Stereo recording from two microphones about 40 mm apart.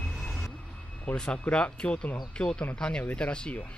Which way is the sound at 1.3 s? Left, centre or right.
Left.